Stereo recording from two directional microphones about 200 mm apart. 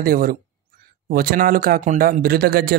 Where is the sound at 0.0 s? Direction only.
45° right (ahead or behind).